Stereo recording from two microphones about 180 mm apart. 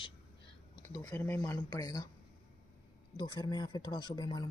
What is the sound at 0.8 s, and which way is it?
Speech, 15° left (ahead or behind).